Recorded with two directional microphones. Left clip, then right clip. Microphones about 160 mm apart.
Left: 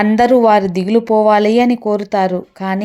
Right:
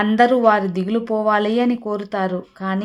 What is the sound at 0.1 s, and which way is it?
Speech, 25° left (ahead or behind).